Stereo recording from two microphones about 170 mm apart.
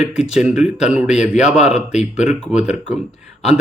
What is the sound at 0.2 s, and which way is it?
Speech, 5° right (ahead or behind).